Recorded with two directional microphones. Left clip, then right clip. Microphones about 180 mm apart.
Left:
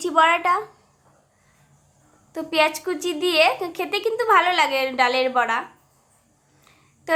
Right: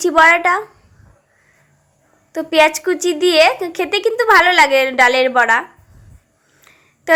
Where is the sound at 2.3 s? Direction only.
20° right (ahead or behind).